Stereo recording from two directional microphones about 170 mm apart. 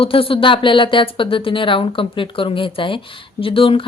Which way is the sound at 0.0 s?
35° left (ahead or behind).